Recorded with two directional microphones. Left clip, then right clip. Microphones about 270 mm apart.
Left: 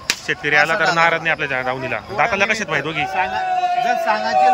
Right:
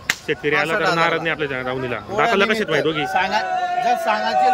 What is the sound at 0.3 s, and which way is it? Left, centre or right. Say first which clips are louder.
Speech: left 4 dB; centre.